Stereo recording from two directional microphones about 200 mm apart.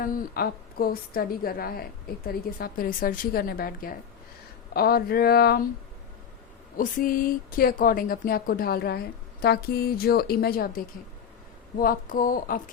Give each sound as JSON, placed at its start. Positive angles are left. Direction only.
{"t": 0.0, "sound": "speech", "side_deg": 45}
{"t": 6.7, "sound": "speech", "side_deg": 45}